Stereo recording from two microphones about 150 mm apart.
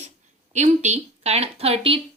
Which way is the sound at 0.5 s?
50° right (ahead or behind).